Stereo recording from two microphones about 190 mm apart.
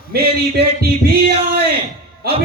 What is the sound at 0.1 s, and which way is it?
Music, 55° right (ahead or behind).